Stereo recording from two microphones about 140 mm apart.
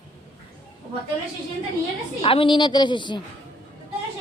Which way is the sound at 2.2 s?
40° left (ahead or behind).